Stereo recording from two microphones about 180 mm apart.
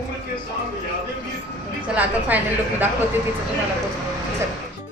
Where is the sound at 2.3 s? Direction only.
10° right (ahead or behind).